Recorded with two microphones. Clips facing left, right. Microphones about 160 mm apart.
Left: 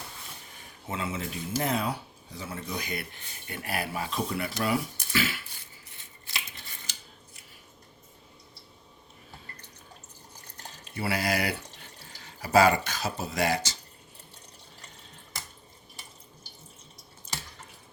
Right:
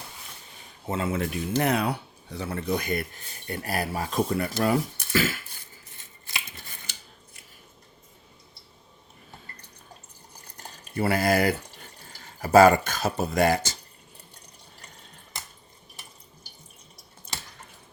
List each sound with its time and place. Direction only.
0.9 s speech: 45° right (ahead or behind)
1.1 s speech: 70° right (ahead or behind); by 5.4 s 45° right (ahead or behind)
10.9 s speech: 50° right (ahead or behind)
17.3 s drip: 60° right (ahead or behind)